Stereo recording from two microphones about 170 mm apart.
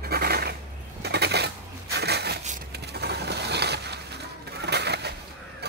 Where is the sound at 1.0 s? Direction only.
75° right (ahead or behind).